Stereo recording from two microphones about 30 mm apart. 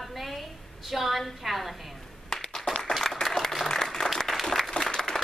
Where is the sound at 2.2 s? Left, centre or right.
Centre.